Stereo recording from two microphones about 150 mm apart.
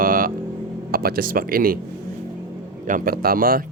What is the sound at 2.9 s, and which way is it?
Speech, 75° right (ahead or behind).